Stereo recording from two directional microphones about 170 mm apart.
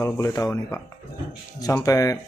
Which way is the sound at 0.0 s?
20° left (ahead or behind).